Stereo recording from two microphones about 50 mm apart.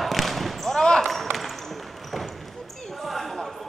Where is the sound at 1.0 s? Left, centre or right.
Centre.